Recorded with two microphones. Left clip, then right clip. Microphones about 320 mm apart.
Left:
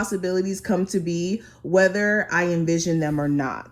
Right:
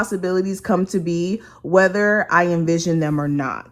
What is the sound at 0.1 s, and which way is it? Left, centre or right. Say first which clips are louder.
Speech: right 3 dB; right.